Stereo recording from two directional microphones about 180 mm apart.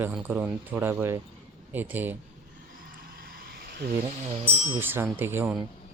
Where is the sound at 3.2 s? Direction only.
60° right (ahead or behind).